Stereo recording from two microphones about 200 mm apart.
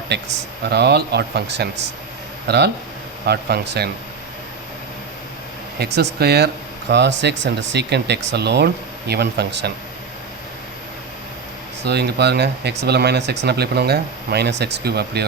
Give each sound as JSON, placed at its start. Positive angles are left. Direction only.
{"t": 0.1, "sound": "speech", "side_deg": -60}
{"t": 5.8, "sound": "speech", "side_deg": -55}
{"t": 11.9, "sound": "speech", "side_deg": -55}